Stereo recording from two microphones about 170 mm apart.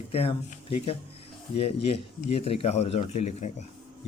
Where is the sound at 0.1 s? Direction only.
35° left (ahead or behind).